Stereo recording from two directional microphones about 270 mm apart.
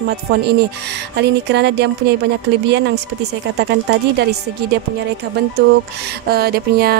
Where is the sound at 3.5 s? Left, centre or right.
Right.